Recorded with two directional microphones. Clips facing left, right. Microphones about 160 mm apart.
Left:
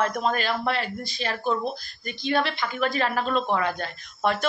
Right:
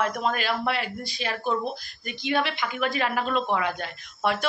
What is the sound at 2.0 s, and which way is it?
Speech, 40° left (ahead or behind).